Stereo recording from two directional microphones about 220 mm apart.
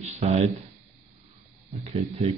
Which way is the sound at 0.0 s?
30° right (ahead or behind).